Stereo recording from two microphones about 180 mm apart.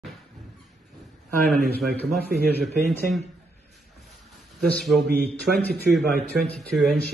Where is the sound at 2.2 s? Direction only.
60° right (ahead or behind).